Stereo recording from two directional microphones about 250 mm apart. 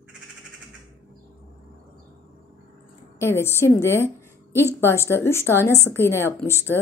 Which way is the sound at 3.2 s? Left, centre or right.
Centre.